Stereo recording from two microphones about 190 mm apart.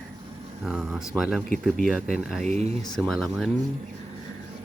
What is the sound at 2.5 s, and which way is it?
Speech, 35° right (ahead or behind).